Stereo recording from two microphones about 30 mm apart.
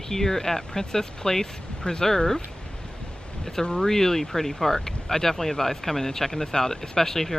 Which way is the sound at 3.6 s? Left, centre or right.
Left.